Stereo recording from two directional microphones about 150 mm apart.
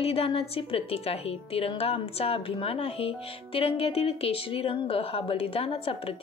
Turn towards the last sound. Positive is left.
turn(degrees=40)  # may be behind; listen again after turning